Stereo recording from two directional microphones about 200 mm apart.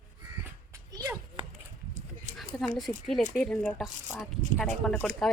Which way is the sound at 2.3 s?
Centre (ahead or behind).